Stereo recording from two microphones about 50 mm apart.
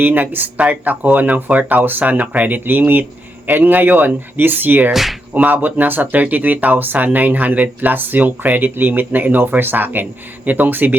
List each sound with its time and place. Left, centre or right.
0.0 s speech: right
4.9 s speech: centre
5.3 s speech: right